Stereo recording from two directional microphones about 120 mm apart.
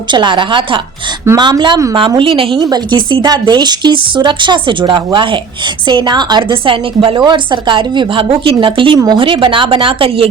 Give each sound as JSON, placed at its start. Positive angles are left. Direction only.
{"t": 0.1, "sound": "a woman's voice", "side_deg": -40}
{"t": 2.6, "sound": "a woman's voice", "side_deg": -35}